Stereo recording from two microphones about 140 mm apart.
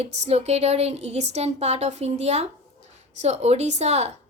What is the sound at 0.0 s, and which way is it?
A woman's voice, 50° right (ahead or behind).